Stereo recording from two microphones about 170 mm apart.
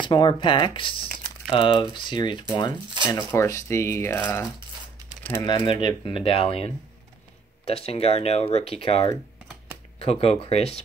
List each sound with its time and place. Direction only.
0.0 s speech: 25° left (ahead or behind)
3.2 s speech: 15° left (ahead or behind)
5.4 s speech: 25° left (ahead or behind)